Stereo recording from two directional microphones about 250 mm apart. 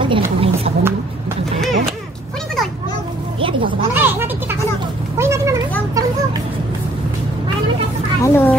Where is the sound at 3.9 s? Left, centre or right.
Centre.